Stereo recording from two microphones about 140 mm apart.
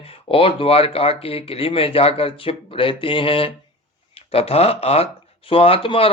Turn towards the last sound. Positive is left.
turn(degrees=40)  # may be behind; listen again after turning